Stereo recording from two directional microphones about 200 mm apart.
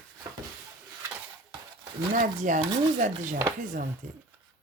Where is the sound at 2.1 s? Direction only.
40° right (ahead or behind).